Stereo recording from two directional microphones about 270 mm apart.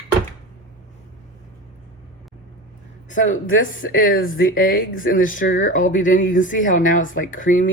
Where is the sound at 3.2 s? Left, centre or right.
Left.